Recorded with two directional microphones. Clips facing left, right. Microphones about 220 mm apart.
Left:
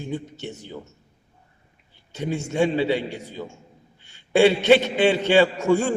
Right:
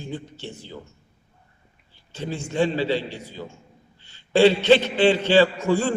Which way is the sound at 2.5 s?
15° left (ahead or behind).